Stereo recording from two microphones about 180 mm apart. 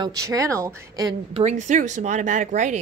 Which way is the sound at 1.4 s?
45° right (ahead or behind).